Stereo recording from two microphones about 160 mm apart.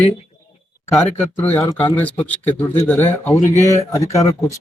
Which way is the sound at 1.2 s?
10° left (ahead or behind).